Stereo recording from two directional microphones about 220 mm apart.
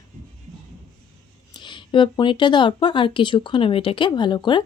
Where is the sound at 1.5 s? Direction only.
20° left (ahead or behind).